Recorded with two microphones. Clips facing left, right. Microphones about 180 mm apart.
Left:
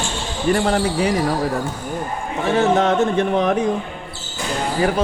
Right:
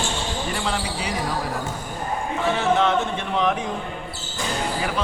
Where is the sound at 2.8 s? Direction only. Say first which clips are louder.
Left 5 dB; 45° left (ahead or behind).